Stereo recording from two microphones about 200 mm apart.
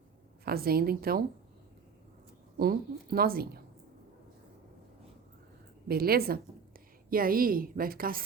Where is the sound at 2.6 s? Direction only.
50° right (ahead or behind).